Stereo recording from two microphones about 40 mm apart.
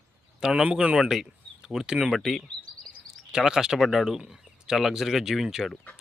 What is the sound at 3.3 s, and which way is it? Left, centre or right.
Speech, centre.